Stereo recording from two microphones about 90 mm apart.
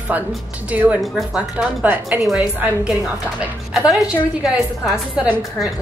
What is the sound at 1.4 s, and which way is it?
Speech, 15° right (ahead or behind).